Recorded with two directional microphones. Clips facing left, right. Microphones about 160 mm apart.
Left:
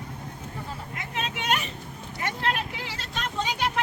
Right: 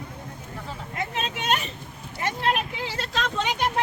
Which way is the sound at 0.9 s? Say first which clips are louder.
Right 4 dB; 25° right (ahead or behind).